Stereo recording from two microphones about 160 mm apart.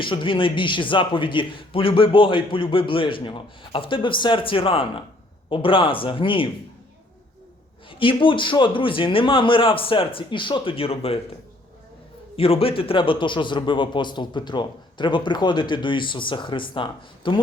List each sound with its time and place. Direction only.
0.0 s a man's voice: 30° left (ahead or behind)
7.9 s a man's voice: 35° left (ahead or behind)
12.4 s a man's voice: 35° left (ahead or behind)